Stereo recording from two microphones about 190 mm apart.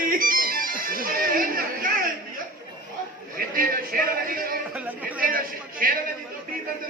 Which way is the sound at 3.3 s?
50° right (ahead or behind).